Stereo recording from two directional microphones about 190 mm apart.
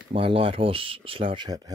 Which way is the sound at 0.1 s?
30° right (ahead or behind).